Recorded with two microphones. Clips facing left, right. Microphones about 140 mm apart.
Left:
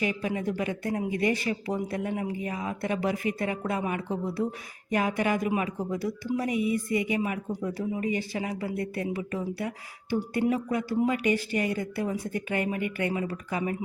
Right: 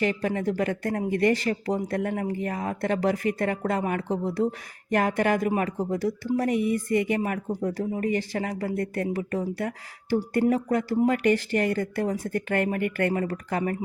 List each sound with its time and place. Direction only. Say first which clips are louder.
0.0 s speech: right 3 dB; 55° right (ahead or behind)
4.1 s speech: right 3 dB; 20° right (ahead or behind)
4.9 s speech: right 3 dB; 50° right (ahead or behind)